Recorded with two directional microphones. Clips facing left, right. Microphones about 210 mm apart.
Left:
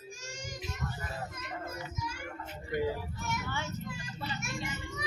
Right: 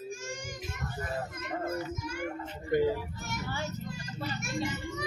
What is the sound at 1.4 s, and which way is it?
Child singing, 55° right (ahead or behind).